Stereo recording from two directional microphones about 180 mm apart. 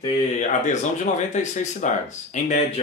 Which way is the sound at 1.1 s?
40° left (ahead or behind).